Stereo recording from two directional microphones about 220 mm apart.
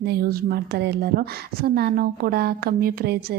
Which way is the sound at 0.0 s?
45° right (ahead or behind).